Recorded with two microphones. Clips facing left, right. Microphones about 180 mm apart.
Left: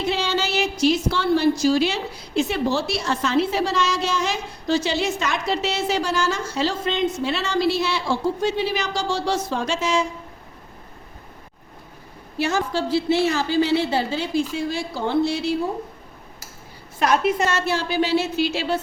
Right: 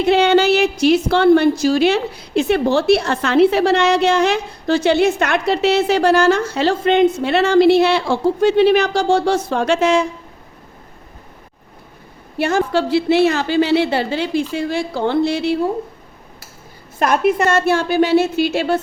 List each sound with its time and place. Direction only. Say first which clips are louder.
0.0 s a woman's voice: right 11 dB; 65° right (ahead or behind)
12.4 s a woman's voice: right 6 dB; 55° right (ahead or behind)
17.0 s a woman's voice: right 4 dB; 55° right (ahead or behind)